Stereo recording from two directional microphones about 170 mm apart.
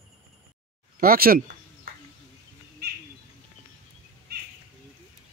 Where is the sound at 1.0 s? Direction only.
60° right (ahead or behind).